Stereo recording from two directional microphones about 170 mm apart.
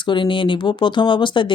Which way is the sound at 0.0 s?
30° left (ahead or behind).